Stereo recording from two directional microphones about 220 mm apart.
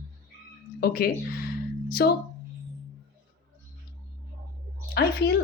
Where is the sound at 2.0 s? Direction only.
45° left (ahead or behind).